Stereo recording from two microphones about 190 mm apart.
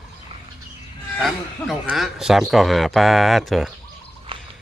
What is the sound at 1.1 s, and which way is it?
A man's voice, centre (ahead or behind).